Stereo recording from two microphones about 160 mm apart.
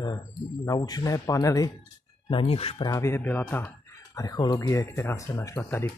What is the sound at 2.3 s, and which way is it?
Speech, 35° left (ahead or behind).